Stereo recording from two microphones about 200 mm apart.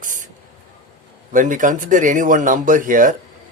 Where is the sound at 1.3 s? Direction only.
40° right (ahead or behind).